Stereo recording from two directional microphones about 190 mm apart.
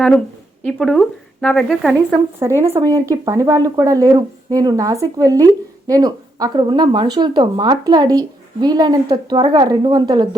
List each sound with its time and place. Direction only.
0.6 s speech: centre (ahead or behind)
2.4 s speech: 15° right (ahead or behind)